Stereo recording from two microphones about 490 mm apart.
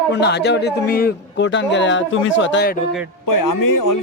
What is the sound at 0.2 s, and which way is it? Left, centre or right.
A man's voice, left.